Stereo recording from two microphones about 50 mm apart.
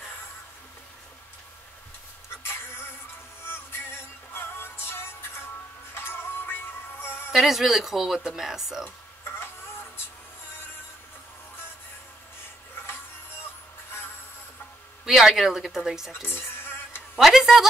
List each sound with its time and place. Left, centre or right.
2.4 s music: left
7.3 s speech: centre
9.2 s a sound: left
15.0 s speech: centre
16.3 s music: left
17.2 s speech: centre